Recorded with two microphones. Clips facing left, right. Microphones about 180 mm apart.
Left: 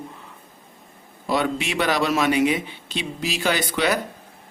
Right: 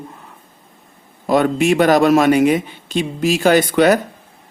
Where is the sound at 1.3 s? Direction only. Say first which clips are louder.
Right 9 dB; 50° right (ahead or behind).